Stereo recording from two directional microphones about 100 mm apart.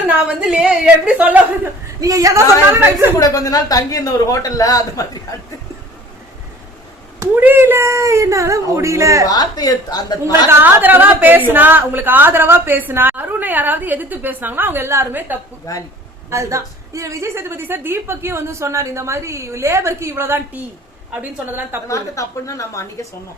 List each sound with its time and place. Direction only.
0.1 s a woman's voice: 10° right (ahead or behind)
2.0 s a woman's voice: 35° right (ahead or behind)
3.2 s a man's voice: 35° left (ahead or behind)
7.3 s a woman's voice: 20° right (ahead or behind)
9.2 s a man's voice: 40° left (ahead or behind)
10.5 s a woman's voice: 20° right (ahead or behind)
15.7 s a man's voice: 35° left (ahead or behind)
16.3 s a woman's voice: 30° right (ahead or behind)
21.8 s a man's voice: 35° left (ahead or behind)